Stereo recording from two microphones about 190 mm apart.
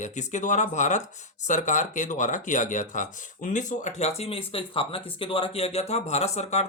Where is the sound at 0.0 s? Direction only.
40° left (ahead or behind).